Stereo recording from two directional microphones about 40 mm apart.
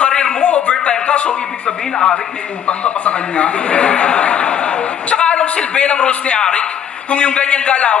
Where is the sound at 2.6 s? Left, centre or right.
Left.